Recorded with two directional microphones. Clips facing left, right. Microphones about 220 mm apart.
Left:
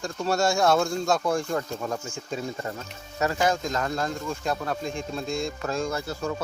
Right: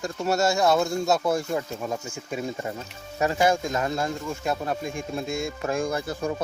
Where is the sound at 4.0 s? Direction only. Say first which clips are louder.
Right 1 dB; 10° right (ahead or behind).